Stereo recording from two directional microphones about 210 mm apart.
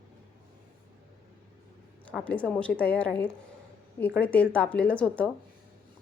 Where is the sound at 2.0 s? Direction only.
5° left (ahead or behind).